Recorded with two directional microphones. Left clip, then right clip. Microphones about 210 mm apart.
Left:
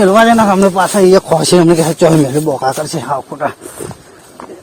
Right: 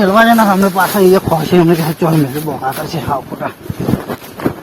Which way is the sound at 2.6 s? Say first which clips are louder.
Left 2 dB; 45° left (ahead or behind).